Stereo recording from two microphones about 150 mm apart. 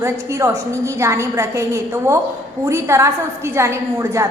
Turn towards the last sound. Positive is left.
turn(degrees=-20)  # may be behind; listen again after turning